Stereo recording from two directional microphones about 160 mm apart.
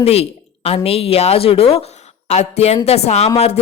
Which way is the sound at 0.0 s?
40° left (ahead or behind).